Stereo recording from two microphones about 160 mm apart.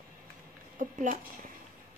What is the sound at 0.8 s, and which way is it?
Speech, 55° right (ahead or behind).